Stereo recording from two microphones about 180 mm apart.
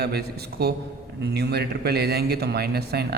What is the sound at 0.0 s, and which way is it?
A man's voice, 60° right (ahead or behind).